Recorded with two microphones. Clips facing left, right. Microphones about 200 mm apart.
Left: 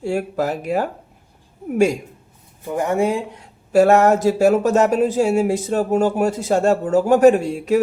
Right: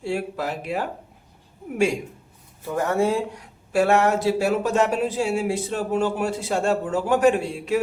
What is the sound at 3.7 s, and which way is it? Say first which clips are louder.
Speech: left 6 dB; 40° left (ahead or behind).